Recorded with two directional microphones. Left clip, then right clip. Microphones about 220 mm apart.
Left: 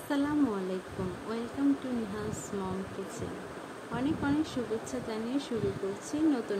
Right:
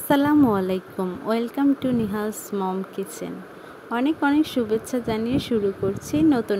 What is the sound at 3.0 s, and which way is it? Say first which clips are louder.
Speech: right 7 dB; 40° right (ahead or behind).